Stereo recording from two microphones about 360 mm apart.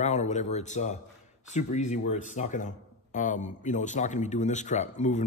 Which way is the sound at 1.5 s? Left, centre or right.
Centre.